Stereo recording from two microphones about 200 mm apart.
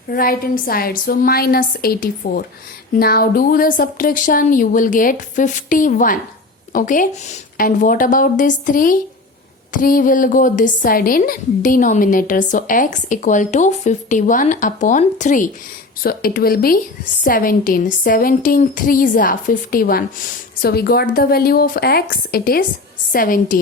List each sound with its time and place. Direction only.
0.1 s a woman's voice: 45° left (ahead or behind)
16.0 s speech: 50° left (ahead or behind)